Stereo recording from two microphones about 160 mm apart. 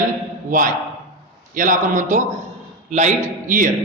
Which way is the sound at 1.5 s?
55° right (ahead or behind).